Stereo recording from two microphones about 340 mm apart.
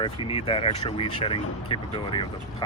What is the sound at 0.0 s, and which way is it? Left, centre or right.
Speech, centre.